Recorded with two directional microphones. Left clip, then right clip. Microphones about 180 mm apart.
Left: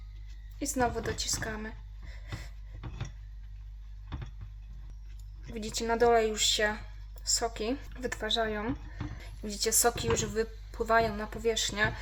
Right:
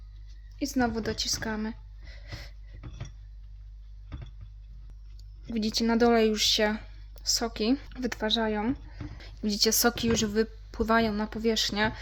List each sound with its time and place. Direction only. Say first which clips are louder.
0.6 s a woman's voice: right 1 dB; 35° right (ahead or behind)
5.5 s speech: right 2 dB; 40° right (ahead or behind)